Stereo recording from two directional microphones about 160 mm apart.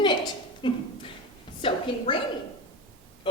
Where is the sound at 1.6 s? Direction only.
35° left (ahead or behind).